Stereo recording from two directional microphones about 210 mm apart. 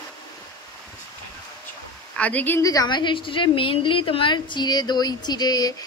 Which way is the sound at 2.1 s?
5° left (ahead or behind).